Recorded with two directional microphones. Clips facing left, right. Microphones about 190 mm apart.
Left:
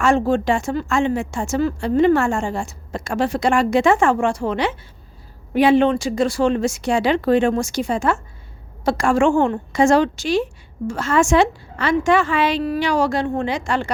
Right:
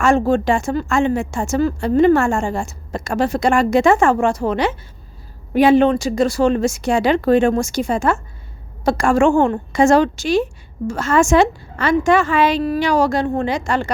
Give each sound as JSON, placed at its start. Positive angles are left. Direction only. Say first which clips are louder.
{"t": 0.0, "sound": "a woman's voice", "louder": "right 2 dB", "side_deg": -45}